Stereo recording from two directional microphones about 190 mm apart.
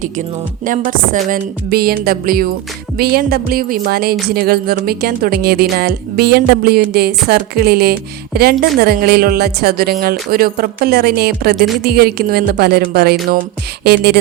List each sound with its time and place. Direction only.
0.6 s speech: 45° right (ahead or behind)
11.8 s music: 55° right (ahead or behind)